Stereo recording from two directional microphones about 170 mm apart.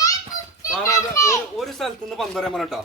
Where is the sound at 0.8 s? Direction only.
20° left (ahead or behind).